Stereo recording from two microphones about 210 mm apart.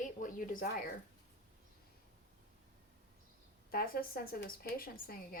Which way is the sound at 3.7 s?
45° left (ahead or behind).